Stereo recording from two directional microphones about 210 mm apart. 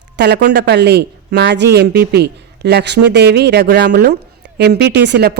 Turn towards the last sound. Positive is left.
turn(degrees=-55)  # may be behind; listen again after turning